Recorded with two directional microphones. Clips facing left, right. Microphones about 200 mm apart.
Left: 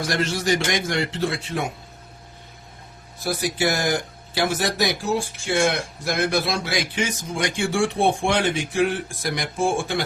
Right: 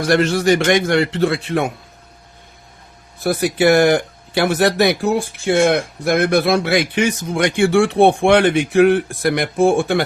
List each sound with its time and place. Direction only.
0.1 s speech: 60° right (ahead or behind)
3.2 s speech: 60° right (ahead or behind)